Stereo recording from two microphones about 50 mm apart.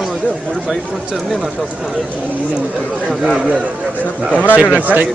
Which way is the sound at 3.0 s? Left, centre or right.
Centre.